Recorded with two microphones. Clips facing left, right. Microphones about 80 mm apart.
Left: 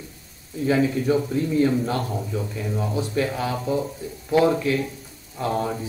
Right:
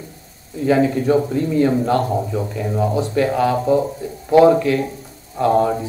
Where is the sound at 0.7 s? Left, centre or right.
Right.